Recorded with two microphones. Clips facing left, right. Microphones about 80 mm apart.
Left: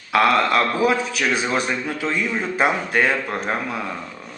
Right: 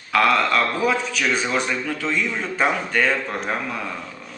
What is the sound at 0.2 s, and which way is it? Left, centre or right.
Speech, centre.